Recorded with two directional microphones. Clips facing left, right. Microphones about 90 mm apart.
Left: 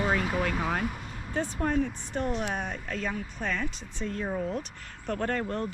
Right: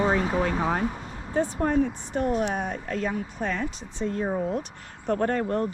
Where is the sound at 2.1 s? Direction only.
30° right (ahead or behind).